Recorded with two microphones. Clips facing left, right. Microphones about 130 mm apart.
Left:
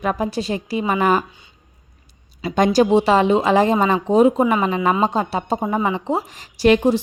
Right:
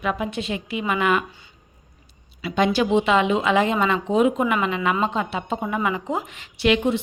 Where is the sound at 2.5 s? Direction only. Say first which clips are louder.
Left 4 dB; 40° left (ahead or behind).